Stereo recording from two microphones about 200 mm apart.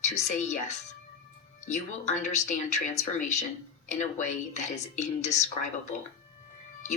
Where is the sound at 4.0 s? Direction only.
35° left (ahead or behind).